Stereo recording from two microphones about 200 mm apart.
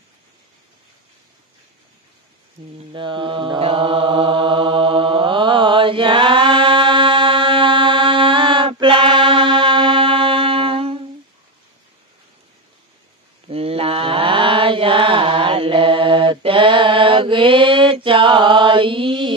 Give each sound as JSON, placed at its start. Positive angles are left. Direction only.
{"t": 2.9, "sound": "mantra", "side_deg": -25}
{"t": 13.5, "sound": "mantra", "side_deg": -30}